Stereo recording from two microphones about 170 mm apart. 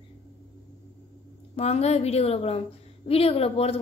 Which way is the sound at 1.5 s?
40° left (ahead or behind).